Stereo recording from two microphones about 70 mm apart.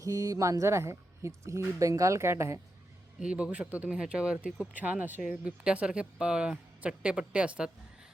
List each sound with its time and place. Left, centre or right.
0.0 s speech: right
3.2 s speech: centre
4.7 s speech: right
5.6 s speech: centre